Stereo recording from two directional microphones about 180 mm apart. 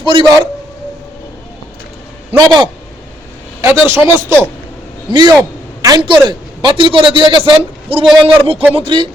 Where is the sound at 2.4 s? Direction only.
25° right (ahead or behind).